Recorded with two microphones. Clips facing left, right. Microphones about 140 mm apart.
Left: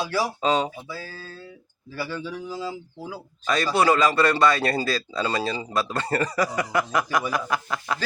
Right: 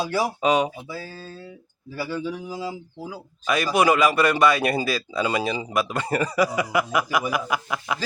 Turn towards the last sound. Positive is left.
turn(degrees=-10)  # may be behind; listen again after turning